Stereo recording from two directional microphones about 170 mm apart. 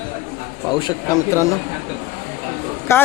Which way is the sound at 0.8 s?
20° left (ahead or behind).